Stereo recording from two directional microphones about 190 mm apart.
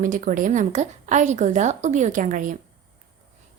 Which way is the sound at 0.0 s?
45° right (ahead or behind).